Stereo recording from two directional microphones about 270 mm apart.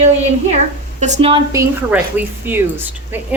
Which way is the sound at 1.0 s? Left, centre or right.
Right.